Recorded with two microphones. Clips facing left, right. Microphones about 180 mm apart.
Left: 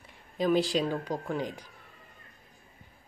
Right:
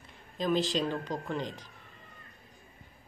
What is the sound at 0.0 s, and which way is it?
Speech, 10° left (ahead or behind).